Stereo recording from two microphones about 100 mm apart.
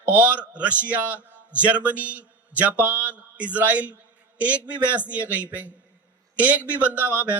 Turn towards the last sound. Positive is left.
turn(degrees=-15)  # may be behind; listen again after turning